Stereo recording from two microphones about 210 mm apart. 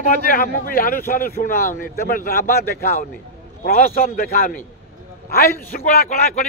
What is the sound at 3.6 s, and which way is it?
A man's voice, 45° left (ahead or behind).